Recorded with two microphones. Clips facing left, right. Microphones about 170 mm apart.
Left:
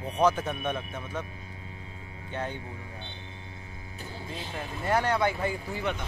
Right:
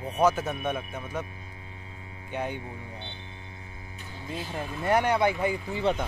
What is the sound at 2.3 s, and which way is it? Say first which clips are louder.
Speech: right 2 dB; 15° right (ahead or behind).